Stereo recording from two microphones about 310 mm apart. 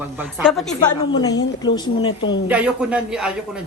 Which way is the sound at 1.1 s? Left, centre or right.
Centre.